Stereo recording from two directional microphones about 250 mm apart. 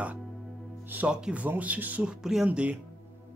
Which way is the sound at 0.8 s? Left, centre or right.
Centre.